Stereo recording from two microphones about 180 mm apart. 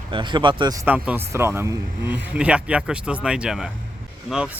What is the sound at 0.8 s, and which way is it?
Speech, 10° right (ahead or behind).